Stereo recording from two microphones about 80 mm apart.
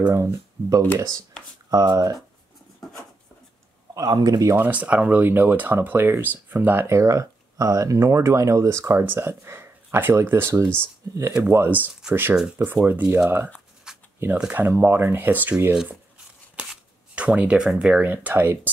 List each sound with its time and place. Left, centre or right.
0.1 s speech: right
1.7 s speech: right
3.9 s speech: right
4.6 s speech: centre; by 8.9 s right
8.9 s speech: right
13.9 s shuffling cards: centre
14.5 s speech: right
15.7 s speech: centre
17.1 s speech: centre